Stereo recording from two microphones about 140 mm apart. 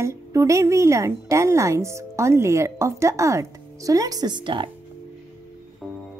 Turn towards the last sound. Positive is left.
turn(degrees=-35)  # may be behind; listen again after turning